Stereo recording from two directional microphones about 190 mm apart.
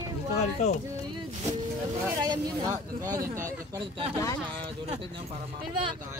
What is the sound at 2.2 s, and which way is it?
Speech, 20° right (ahead or behind).